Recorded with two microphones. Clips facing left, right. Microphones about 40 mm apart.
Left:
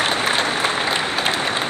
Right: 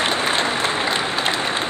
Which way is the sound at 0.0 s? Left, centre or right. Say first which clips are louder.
Left 1 dB; centre.